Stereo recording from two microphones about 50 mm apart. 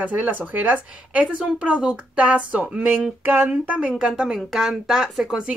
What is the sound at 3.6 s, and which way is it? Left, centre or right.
Speech, right.